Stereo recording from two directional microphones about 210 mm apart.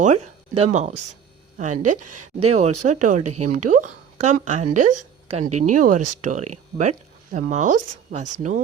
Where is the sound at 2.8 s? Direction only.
35° right (ahead or behind).